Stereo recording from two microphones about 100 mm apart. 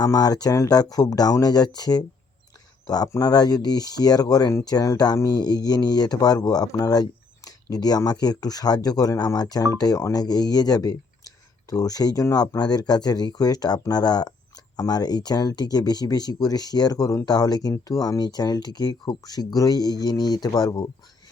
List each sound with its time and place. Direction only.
0.0 s speech: 40° left (ahead or behind)